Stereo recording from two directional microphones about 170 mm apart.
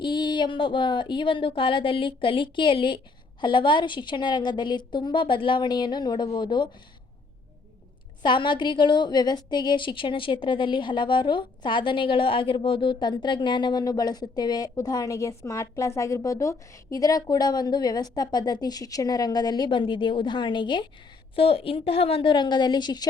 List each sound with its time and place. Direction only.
0.0 s a woman's voice: 25° left (ahead or behind)
8.2 s a woman's voice: 30° left (ahead or behind)